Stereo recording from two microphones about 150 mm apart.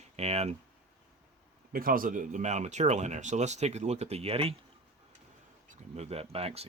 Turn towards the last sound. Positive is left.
turn(degrees=-40)  # may be behind; listen again after turning